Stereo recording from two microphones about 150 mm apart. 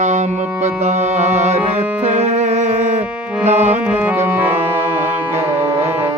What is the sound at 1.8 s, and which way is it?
Music, 10° right (ahead or behind).